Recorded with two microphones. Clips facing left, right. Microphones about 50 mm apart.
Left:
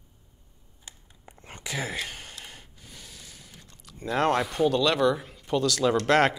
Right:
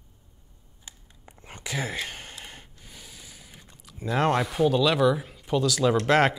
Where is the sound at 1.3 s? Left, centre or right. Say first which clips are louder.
Right 1 dB; right.